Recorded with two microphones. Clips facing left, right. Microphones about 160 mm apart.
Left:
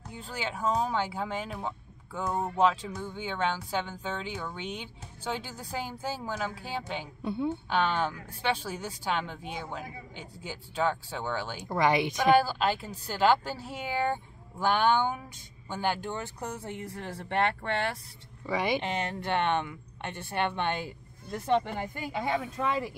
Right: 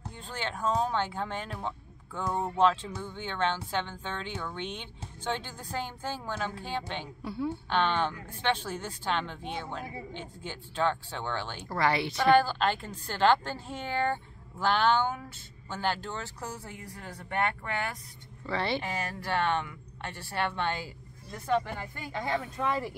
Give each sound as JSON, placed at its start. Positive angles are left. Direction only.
{"t": 0.1, "sound": "a woman's voice", "side_deg": 10}
{"t": 18.5, "sound": "a woman's voice", "side_deg": 15}
{"t": 18.9, "sound": "a woman's voice", "side_deg": 25}